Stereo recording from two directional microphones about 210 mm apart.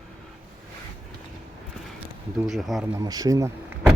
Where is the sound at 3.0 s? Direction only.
20° right (ahead or behind).